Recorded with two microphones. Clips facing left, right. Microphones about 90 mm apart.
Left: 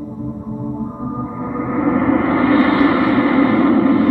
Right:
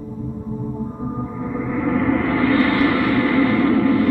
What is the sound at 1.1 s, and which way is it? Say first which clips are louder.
Gong: left 3 dB; 30° left (ahead or behind).